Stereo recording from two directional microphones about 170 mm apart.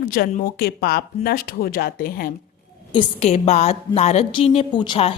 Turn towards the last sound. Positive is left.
turn(degrees=30)  # may be behind; listen again after turning